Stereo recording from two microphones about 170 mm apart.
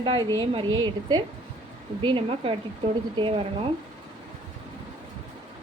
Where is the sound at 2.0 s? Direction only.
30° right (ahead or behind).